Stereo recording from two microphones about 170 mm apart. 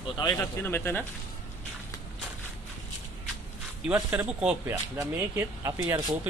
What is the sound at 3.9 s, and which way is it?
Speech, 10° right (ahead or behind).